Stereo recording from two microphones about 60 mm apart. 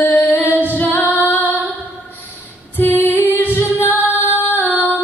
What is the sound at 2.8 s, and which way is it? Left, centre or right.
Female singing, left.